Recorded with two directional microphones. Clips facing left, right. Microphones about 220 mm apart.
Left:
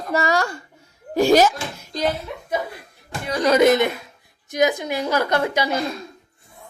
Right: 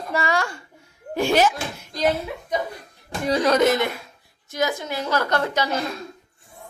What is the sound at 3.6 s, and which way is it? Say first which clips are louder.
A woman's voice: left 4 dB; 20° left (ahead or behind).